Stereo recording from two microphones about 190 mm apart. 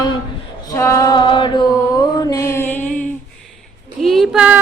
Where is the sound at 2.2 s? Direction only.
20° left (ahead or behind).